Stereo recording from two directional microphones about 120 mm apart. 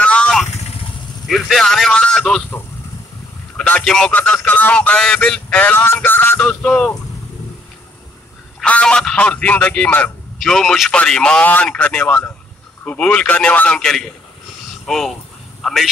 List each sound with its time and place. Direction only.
0.0 s vehicle: 10° left (ahead or behind)
1.2 s a man's voice: centre (ahead or behind)
3.5 s a man's voice: 10° left (ahead or behind)
8.6 s a man's voice: 10° left (ahead or behind)
10.4 s a man's voice: 5° left (ahead or behind)